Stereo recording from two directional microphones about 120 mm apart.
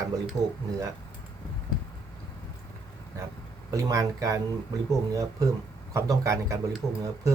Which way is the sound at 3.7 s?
30° right (ahead or behind).